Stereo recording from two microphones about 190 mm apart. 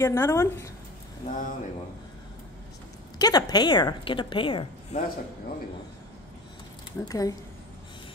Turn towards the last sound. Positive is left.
turn(degrees=20)  # may be behind; listen again after turning